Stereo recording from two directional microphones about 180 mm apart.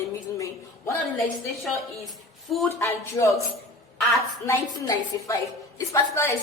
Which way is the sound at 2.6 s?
15° left (ahead or behind).